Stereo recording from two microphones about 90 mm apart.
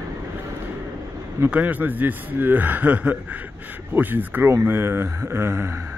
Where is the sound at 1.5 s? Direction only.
15° right (ahead or behind).